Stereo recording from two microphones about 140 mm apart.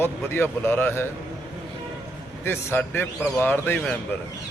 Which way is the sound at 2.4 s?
15° left (ahead or behind).